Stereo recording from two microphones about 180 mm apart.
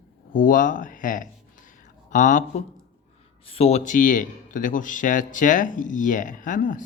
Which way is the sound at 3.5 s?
35° left (ahead or behind).